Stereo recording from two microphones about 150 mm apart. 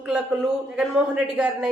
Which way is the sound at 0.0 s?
5° right (ahead or behind).